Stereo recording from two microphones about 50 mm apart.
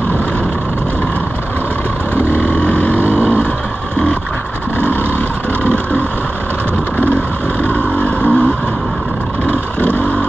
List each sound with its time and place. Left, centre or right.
2.3 s vehicle: left
7.6 s vehicle: left
9.5 s vehicle: left